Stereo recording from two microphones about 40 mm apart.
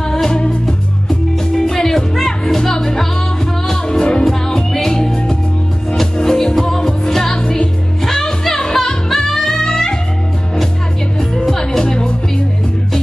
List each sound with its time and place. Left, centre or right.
0.0 s music: centre
1.5 s music: centre
11.1 s music: centre